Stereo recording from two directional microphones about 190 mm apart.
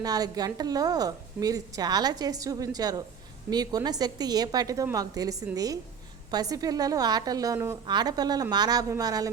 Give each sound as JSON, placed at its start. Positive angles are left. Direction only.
{"t": 0.0, "sound": "a woman's voice", "side_deg": -20}